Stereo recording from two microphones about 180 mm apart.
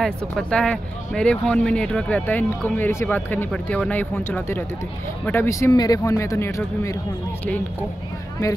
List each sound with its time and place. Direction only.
0.0 s speech: 5° left (ahead or behind)